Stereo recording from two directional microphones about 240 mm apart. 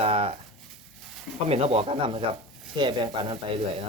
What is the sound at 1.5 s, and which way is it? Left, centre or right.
Speech, right.